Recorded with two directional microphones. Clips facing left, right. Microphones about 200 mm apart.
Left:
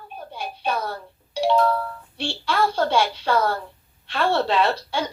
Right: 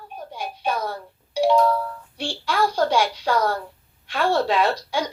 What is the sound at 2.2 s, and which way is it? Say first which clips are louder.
A woman's voice: even; 10° right (ahead or behind).